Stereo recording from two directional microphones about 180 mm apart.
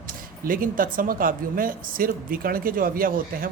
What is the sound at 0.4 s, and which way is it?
Speech, 50° right (ahead or behind).